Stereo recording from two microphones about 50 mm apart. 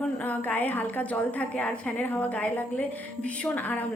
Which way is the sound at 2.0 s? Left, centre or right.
Left.